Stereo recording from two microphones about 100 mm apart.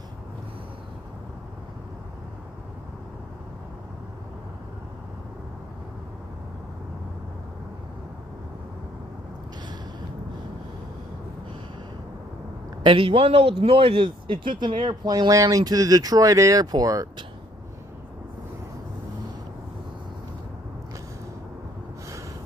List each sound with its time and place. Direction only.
12.8 s speech: 60° right (ahead or behind)
15.0 s speech: 40° right (ahead or behind)